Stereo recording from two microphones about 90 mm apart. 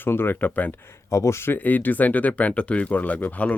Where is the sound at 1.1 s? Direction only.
35° left (ahead or behind); by 3.5 s 15° left (ahead or behind).